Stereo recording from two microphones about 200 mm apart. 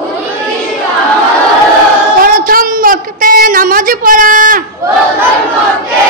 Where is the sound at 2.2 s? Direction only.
45° right (ahead or behind).